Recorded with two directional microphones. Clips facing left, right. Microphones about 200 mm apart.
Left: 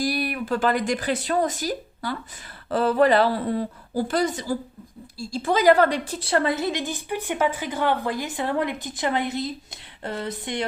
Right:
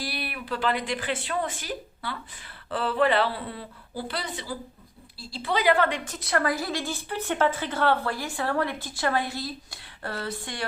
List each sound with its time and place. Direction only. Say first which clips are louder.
0.0 s a woman's voice: left 9 dB; 45° left (ahead or behind); by 10.7 s 20° left (ahead or behind)